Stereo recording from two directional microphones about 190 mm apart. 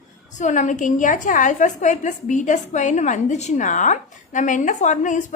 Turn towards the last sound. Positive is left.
turn(degrees=40)  # may be behind; listen again after turning